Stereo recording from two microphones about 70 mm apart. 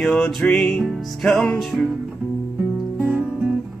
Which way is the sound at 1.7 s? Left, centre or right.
Centre.